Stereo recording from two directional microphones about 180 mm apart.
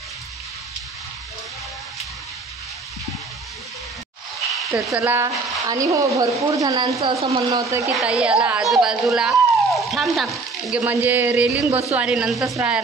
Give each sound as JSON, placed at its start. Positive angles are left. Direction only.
{"t": 4.8, "sound": "a woman's voice", "side_deg": -10}
{"t": 7.0, "sound": "a woman's voice", "side_deg": -35}
{"t": 7.5, "sound": "a woman's voice", "side_deg": -15}
{"t": 7.9, "sound": "speech", "side_deg": -5}
{"t": 10.8, "sound": "a woman's voice", "side_deg": -10}